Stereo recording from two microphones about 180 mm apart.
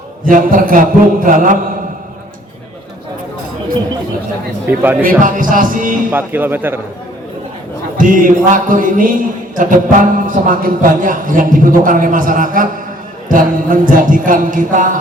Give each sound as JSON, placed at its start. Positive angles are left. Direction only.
{"t": 0.3, "sound": "a man's voice", "side_deg": -50}
{"t": 4.6, "sound": "speech", "side_deg": -10}
{"t": 5.0, "sound": "a man's voice", "side_deg": -50}
{"t": 6.1, "sound": "speech", "side_deg": -10}
{"t": 7.9, "sound": "a man's voice", "side_deg": -50}